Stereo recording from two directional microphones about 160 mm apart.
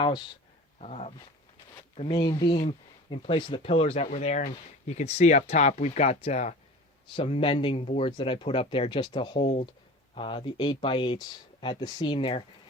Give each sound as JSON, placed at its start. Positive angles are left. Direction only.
{"t": 0.8, "sound": "speech", "side_deg": 40}
{"t": 2.0, "sound": "speech", "side_deg": 30}